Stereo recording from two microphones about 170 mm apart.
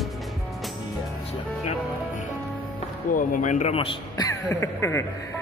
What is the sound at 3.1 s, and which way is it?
A man's voice, 50° left (ahead or behind).